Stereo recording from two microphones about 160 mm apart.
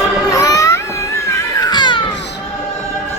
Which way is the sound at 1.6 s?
25° left (ahead or behind).